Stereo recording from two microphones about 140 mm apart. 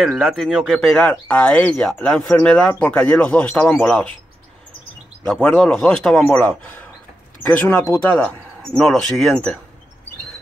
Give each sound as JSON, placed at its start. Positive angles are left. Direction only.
{"t": 0.0, "sound": "speech", "side_deg": 0}
{"t": 5.2, "sound": "speech", "side_deg": 10}